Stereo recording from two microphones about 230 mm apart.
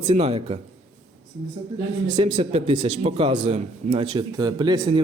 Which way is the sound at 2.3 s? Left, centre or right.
Right.